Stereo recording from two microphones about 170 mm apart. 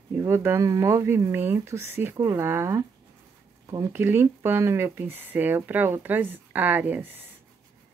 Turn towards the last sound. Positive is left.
turn(degrees=-10)  # may be behind; listen again after turning